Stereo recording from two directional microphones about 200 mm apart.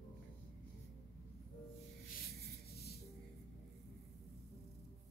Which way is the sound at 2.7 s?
50° left (ahead or behind).